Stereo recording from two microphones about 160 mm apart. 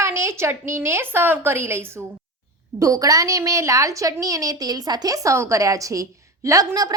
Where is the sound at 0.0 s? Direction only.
15° right (ahead or behind).